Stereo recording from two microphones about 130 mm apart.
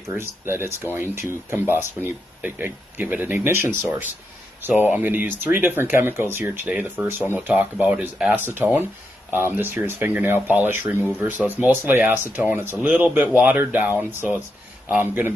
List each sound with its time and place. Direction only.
0.1 s speech: 20° right (ahead or behind)